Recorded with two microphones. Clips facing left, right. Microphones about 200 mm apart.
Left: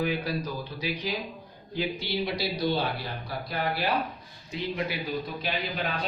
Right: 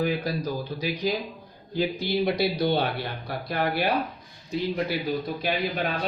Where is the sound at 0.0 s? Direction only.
40° right (ahead or behind); by 3.6 s 60° right (ahead or behind).